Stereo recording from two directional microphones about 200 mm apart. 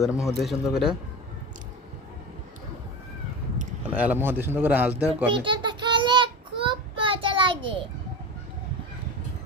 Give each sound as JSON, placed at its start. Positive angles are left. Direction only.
{"t": 0.0, "sound": "speech", "side_deg": 0}
{"t": 3.9, "sound": "a man's voice", "side_deg": -10}
{"t": 5.0, "sound": "a sound", "side_deg": -25}